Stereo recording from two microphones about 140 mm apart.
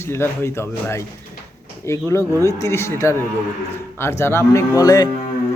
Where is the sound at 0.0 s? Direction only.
15° left (ahead or behind).